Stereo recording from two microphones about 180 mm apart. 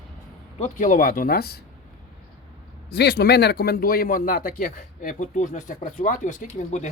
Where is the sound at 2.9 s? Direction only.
65° left (ahead or behind).